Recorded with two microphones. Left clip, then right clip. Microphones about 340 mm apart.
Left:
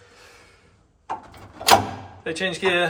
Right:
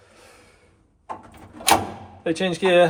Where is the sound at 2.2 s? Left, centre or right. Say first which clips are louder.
Right 2 dB; centre.